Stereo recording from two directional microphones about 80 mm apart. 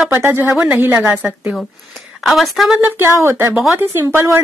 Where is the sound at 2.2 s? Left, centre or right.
Centre.